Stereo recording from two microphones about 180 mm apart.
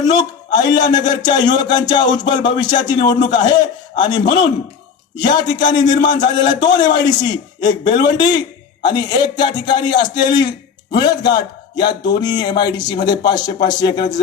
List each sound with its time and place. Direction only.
0.1 s a man's voice: 25° left (ahead or behind)